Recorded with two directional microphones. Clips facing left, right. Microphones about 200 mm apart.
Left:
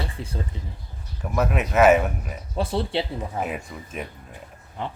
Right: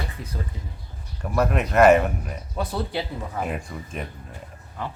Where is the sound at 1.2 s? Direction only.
Centre (ahead or behind).